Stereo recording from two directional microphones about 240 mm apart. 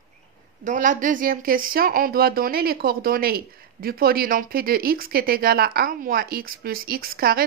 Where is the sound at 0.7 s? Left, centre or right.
Right.